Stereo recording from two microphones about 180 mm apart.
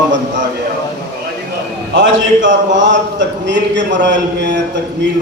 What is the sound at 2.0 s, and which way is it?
A man's voice, 90° right.